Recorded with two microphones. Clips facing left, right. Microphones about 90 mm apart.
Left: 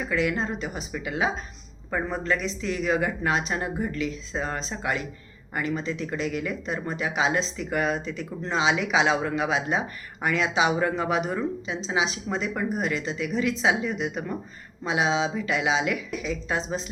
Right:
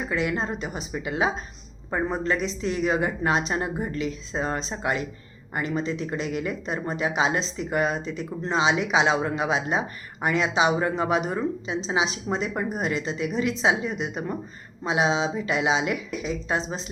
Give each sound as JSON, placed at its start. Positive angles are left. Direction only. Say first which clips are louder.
{"t": 0.1, "sound": "speech", "louder": "left 1 dB", "side_deg": -30}